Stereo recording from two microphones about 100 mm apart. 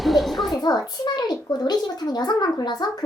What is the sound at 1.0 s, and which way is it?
A child's voice, 45° left (ahead or behind).